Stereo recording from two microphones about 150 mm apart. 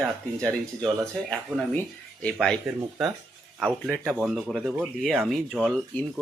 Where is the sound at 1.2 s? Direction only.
5° left (ahead or behind).